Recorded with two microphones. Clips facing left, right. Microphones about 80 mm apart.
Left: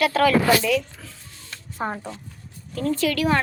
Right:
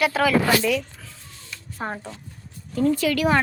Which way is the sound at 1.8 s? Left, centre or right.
Centre.